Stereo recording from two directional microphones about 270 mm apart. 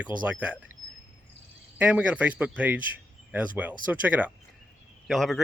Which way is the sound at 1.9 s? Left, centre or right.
Centre.